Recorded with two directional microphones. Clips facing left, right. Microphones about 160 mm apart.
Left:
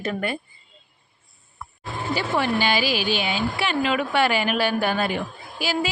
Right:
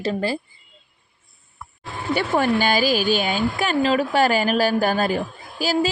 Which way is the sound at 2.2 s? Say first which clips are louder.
Right 4 dB; 45° right (ahead or behind).